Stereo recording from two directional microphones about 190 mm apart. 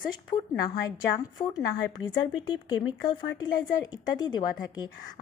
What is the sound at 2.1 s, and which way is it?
Speech, 20° left (ahead or behind).